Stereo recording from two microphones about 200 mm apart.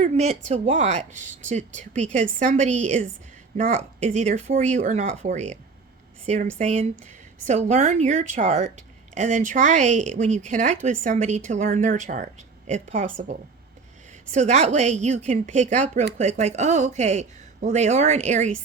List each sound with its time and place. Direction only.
0.0 s speech: 35° right (ahead or behind)
14.3 s speech: 35° right (ahead or behind)